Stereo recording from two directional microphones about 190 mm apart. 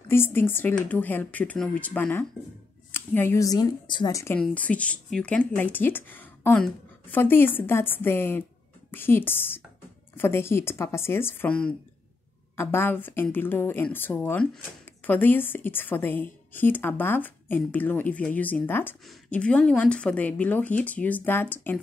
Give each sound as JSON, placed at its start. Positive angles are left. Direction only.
{"t": 0.1, "sound": "speech", "side_deg": 10}